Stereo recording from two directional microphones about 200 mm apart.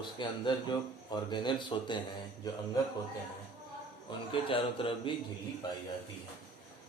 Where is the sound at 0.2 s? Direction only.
20° left (ahead or behind).